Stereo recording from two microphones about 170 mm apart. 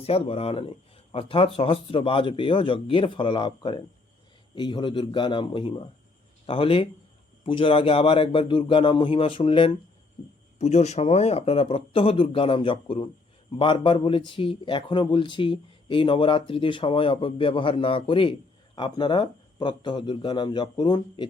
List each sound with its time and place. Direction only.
0.0 s speech: 35° left (ahead or behind)
10.6 s speech: 40° left (ahead or behind)